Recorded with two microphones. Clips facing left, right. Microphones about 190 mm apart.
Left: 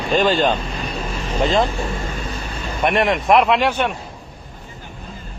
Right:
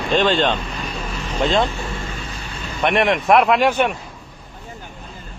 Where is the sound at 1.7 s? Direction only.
40° left (ahead or behind).